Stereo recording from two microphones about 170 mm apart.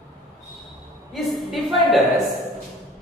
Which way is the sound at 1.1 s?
Centre (ahead or behind).